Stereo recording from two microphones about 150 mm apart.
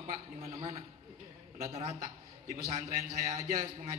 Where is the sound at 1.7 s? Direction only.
45° right (ahead or behind).